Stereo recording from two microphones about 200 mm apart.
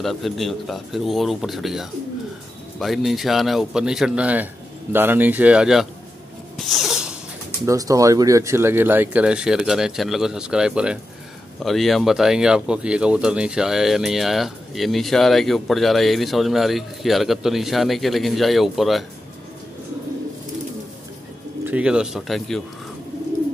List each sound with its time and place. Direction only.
0.0 s a man's voice: centre (ahead or behind)
6.5 s a sound: centre (ahead or behind)
7.6 s speech: 15° right (ahead or behind); by 19.0 s centre (ahead or behind)
21.6 s speech: 5° right (ahead or behind)